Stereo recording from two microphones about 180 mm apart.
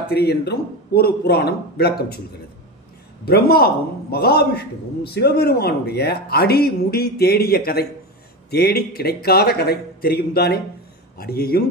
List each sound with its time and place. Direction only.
0.1 s a man's voice: 65° left (ahead or behind)
3.3 s a man's voice: 60° left (ahead or behind)